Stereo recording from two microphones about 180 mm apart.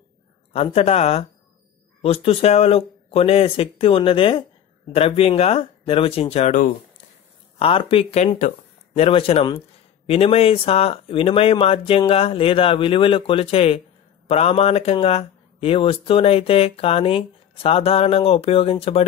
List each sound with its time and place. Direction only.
0.5 s speech: 35° left (ahead or behind)